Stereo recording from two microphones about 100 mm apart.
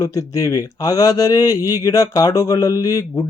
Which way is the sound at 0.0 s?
35° left (ahead or behind).